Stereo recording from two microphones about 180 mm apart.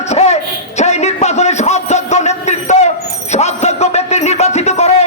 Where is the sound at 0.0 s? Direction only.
35° left (ahead or behind).